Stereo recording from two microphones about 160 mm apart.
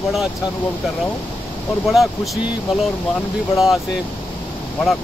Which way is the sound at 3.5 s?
Centre (ahead or behind).